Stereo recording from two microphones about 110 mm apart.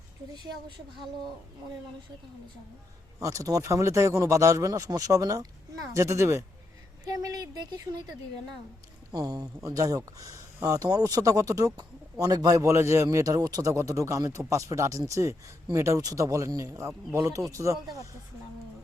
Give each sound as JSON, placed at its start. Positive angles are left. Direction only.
{"t": 3.2, "sound": "speech", "side_deg": -30}
{"t": 9.1, "sound": "speech", "side_deg": -35}